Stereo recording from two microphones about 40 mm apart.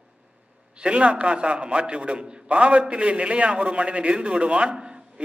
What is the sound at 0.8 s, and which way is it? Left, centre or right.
A man's voice, right.